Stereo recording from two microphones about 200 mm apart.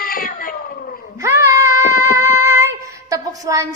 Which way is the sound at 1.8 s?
40° left (ahead or behind).